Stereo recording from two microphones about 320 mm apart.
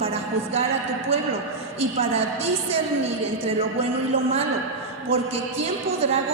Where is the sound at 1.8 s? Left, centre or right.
Centre.